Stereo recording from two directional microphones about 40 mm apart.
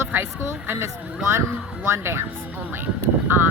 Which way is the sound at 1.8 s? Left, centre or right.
Right.